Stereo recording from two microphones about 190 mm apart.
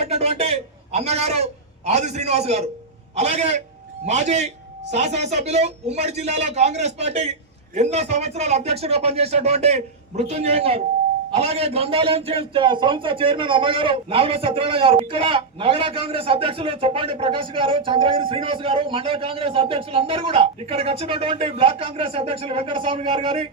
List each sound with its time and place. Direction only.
0.0 s a man's voice: 35° right (ahead or behind)